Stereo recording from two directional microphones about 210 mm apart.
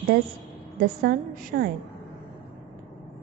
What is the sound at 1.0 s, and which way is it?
Speech, 50° right (ahead or behind).